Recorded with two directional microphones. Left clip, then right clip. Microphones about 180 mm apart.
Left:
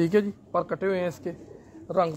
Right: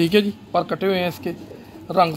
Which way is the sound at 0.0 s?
40° left (ahead or behind).